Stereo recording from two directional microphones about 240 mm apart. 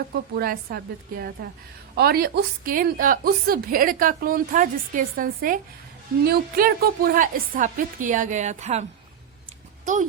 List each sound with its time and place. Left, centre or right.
0.3 s a woman's voice: right